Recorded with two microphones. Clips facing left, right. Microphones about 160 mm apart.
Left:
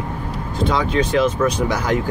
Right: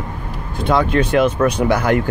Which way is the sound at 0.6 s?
55° right (ahead or behind).